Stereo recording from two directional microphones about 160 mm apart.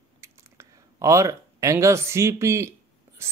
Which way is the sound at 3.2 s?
15° right (ahead or behind).